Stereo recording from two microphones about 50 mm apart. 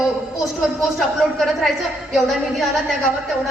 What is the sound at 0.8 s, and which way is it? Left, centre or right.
Speech, centre.